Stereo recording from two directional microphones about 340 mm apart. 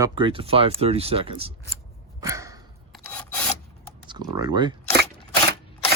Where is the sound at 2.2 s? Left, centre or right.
Centre.